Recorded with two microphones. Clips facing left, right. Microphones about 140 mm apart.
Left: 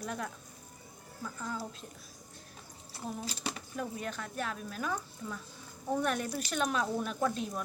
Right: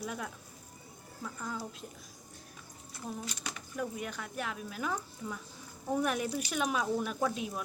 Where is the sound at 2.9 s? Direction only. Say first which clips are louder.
Left 1 dB; 30° left (ahead or behind).